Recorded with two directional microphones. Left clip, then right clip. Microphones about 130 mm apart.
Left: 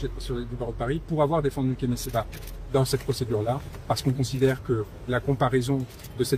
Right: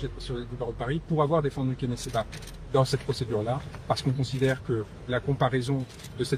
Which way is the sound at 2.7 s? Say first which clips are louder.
Even; 45° left (ahead or behind).